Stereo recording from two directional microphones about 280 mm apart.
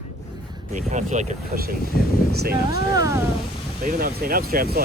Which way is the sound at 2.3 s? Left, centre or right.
Right.